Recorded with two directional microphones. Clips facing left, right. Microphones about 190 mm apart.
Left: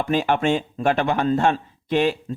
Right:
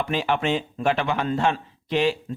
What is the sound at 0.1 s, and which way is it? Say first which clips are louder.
A man's voice: left 6 dB; 45° left (ahead or behind).